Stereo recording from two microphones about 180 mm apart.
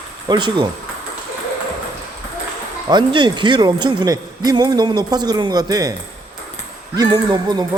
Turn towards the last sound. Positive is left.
turn(degrees=-25)  # may be behind; listen again after turning